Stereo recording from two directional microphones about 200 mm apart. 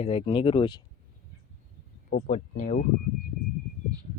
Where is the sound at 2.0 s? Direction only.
45° left (ahead or behind).